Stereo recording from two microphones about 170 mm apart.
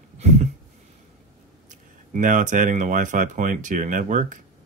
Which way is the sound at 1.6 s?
50° right (ahead or behind).